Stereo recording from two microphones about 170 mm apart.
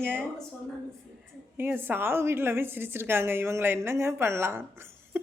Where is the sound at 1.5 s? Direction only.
10° right (ahead or behind).